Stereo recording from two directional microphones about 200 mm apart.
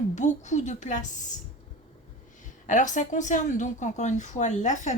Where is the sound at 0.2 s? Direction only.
35° left (ahead or behind).